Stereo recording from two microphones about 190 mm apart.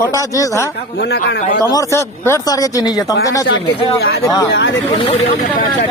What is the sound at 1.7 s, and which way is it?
A man's voice, 15° left (ahead or behind).